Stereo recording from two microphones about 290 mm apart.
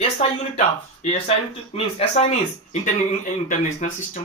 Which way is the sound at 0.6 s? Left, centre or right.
Left.